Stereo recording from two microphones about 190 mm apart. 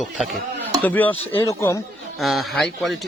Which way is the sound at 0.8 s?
10° left (ahead or behind).